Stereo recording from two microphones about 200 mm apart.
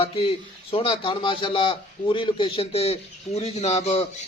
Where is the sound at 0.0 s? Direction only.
30° left (ahead or behind).